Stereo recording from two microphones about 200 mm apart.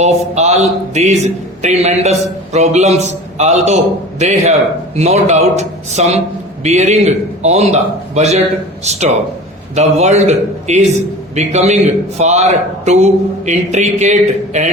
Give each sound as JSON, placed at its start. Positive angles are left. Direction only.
{"t": 0.0, "sound": "a man's voice", "side_deg": -35}